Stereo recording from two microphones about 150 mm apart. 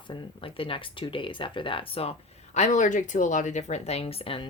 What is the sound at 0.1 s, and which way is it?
A woman's voice, 30° left (ahead or behind).